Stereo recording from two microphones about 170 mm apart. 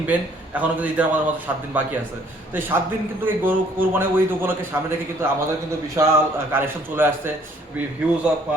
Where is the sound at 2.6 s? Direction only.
10° right (ahead or behind).